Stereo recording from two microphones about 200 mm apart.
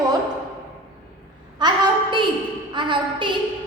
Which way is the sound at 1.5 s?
20° right (ahead or behind).